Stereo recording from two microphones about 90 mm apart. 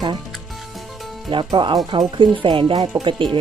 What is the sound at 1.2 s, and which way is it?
Speech, 65° right (ahead or behind).